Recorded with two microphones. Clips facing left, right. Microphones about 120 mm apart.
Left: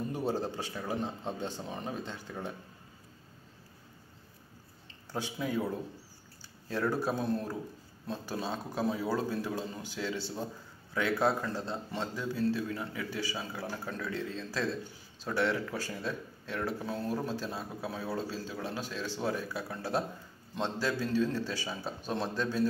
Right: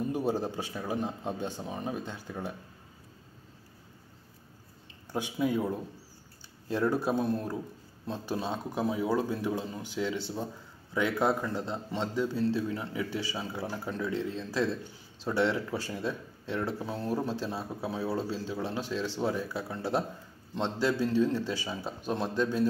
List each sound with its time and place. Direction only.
0.1 s a man's voice: 15° right (ahead or behind)
5.1 s a man's voice: 15° right (ahead or behind)
6.7 s a man's voice: 15° right (ahead or behind)
17.3 s a man's voice: 25° right (ahead or behind)